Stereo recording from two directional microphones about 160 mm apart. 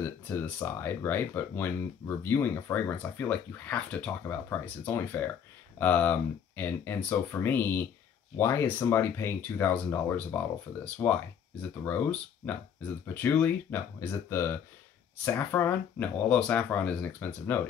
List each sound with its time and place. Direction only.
0.0 s speech: 15° left (ahead or behind)